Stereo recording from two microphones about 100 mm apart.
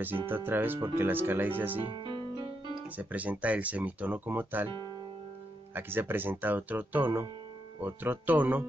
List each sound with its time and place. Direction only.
0.3 s speech: 20° right (ahead or behind)
1.9 s music: 50° right (ahead or behind)
3.0 s speech: 15° right (ahead or behind)
4.6 s speech: 50° right (ahead or behind)
5.8 s speech: 20° right (ahead or behind)